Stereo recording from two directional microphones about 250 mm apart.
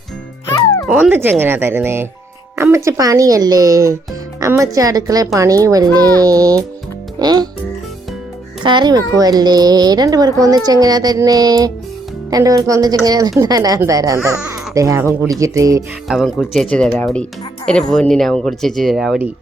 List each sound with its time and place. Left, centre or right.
0.9 s a child's voice: centre
8.6 s a child's voice: centre
16.0 s speech: centre